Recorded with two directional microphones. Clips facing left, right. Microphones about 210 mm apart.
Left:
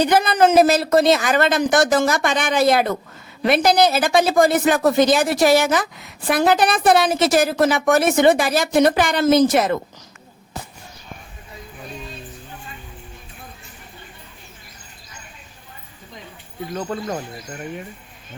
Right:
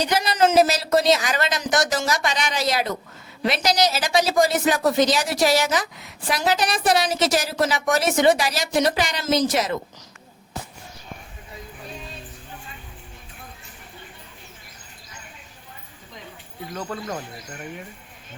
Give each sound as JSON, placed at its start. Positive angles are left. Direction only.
{"t": 0.0, "sound": "a woman's voice", "side_deg": 55}
{"t": 16.7, "sound": "speech", "side_deg": 30}